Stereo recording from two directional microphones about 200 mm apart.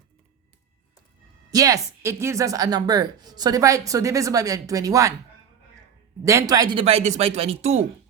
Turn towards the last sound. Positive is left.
turn(degrees=-30)  # may be behind; listen again after turning